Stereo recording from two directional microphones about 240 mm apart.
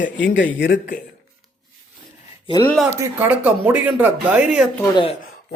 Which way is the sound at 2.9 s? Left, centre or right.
Centre.